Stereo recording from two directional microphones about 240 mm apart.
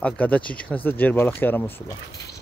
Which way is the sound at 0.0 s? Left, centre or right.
Centre.